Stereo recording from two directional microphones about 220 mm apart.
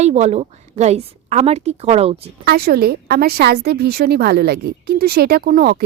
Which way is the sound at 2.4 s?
45° right (ahead or behind).